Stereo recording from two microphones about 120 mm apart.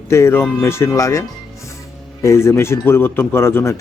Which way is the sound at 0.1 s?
20° left (ahead or behind).